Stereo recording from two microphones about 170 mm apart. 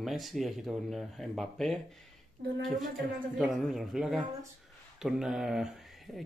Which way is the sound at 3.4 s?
Centre (ahead or behind).